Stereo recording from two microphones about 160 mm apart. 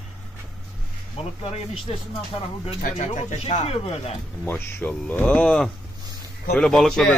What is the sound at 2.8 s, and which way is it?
Speech, 50° left (ahead or behind).